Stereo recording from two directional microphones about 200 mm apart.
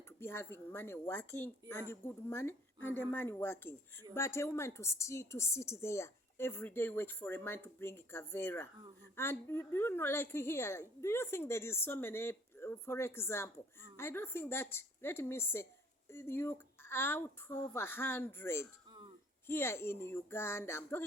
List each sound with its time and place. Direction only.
0.2 s a woman's voice: 10° left (ahead or behind)